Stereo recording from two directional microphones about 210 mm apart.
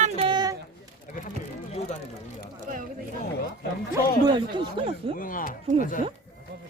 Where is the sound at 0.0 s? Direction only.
25° right (ahead or behind).